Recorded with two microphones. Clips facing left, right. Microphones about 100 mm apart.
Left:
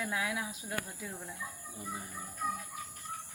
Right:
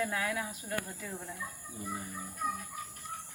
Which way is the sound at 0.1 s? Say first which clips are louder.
Right 1 dB; 15° left (ahead or behind).